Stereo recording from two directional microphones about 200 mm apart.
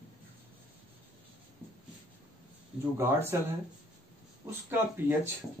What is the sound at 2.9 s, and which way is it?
Speech, 10° right (ahead or behind).